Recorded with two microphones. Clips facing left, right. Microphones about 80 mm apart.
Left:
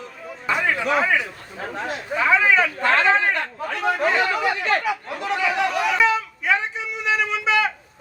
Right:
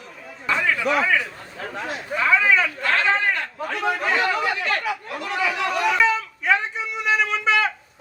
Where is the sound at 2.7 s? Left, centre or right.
Left.